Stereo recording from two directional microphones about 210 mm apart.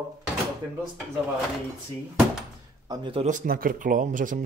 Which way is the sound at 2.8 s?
20° right (ahead or behind).